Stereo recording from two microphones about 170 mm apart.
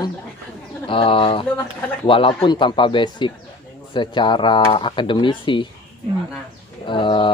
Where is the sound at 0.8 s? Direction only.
30° left (ahead or behind).